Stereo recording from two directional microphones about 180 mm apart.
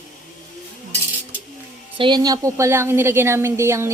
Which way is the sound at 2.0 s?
25° right (ahead or behind).